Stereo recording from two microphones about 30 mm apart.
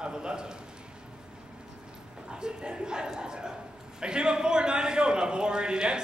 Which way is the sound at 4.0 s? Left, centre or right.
Right.